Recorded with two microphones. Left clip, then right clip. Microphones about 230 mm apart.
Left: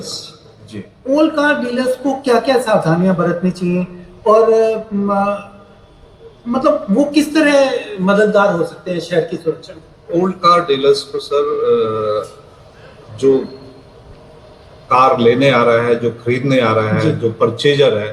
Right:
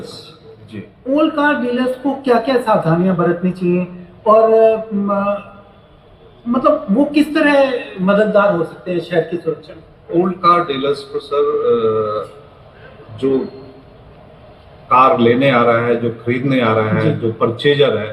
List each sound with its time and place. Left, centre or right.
0.7 s a man's voice: left
6.5 s a man's voice: left
14.8 s a man's voice: left